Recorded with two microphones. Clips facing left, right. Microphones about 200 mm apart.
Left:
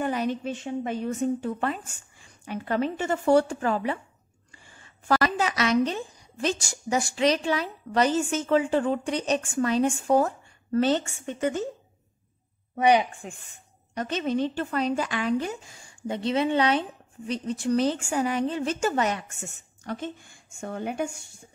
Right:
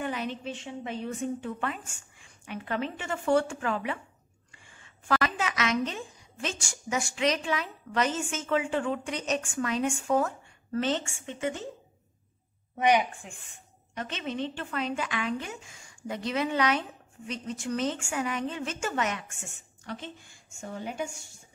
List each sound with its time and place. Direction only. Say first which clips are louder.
0.0 s a woman's voice: left 6 dB; 40° left (ahead or behind)
12.7 s a woman's voice: left 3 dB; 35° left (ahead or behind); by 21.2 s 55° left (ahead or behind)